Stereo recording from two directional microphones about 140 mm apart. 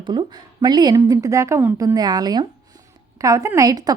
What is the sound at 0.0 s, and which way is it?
A woman's voice, 35° right (ahead or behind).